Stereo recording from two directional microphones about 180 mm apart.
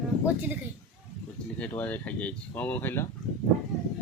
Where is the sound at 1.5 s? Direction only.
10° left (ahead or behind).